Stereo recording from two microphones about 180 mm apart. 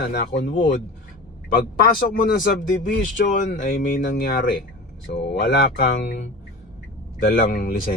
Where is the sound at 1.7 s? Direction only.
50° left (ahead or behind).